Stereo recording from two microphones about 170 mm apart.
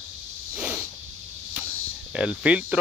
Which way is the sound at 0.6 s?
5° right (ahead or behind).